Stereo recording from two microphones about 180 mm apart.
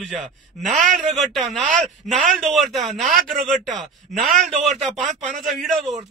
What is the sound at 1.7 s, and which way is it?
Speech, 45° right (ahead or behind).